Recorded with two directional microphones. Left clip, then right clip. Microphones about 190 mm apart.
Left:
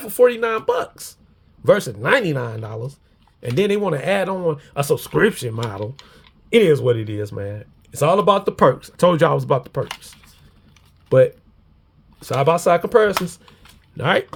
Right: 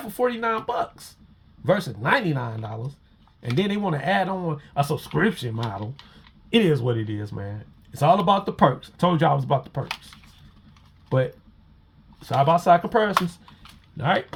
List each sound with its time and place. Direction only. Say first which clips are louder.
0.1 s speech: left 8 dB; 45° left (ahead or behind)
12.2 s speech: left 2 dB; 40° left (ahead or behind)